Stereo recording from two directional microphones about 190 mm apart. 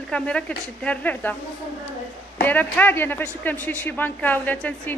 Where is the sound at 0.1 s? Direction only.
5° left (ahead or behind).